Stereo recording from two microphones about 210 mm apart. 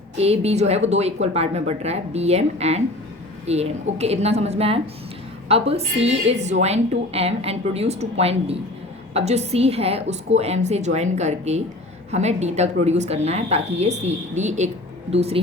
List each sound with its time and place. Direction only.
0.2 s a woman's voice: 30° right (ahead or behind)